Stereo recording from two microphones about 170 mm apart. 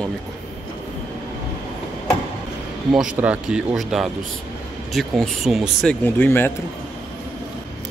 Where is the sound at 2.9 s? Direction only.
5° right (ahead or behind).